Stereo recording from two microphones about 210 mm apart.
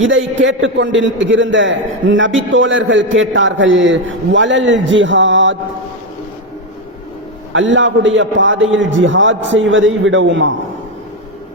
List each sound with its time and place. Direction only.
0.0 s a man's voice: 65° right (ahead or behind)
7.5 s a man's voice: 65° right (ahead or behind)